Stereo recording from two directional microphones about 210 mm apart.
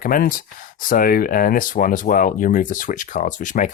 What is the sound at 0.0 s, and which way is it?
Speech, 40° left (ahead or behind).